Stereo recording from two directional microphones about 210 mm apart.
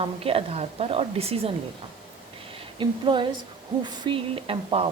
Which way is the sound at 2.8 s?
20° right (ahead or behind).